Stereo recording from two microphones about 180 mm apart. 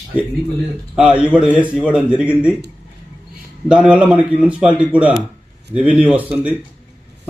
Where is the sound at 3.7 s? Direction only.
5° right (ahead or behind).